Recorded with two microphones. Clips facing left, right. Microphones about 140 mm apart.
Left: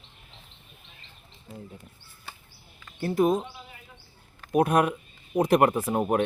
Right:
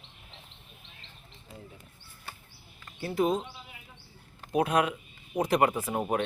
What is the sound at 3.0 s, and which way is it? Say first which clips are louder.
Speech: left 4 dB; 50° left (ahead or behind).